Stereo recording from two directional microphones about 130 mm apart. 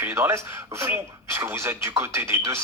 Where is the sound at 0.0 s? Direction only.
20° right (ahead or behind).